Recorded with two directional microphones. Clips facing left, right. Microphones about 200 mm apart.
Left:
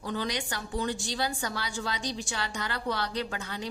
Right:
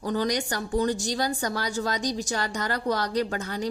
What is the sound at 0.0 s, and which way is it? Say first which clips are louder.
A woman's voice: right 6 dB; 40° right (ahead or behind).